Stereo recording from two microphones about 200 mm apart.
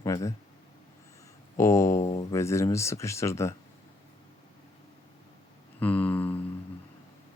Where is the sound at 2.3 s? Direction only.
15° left (ahead or behind).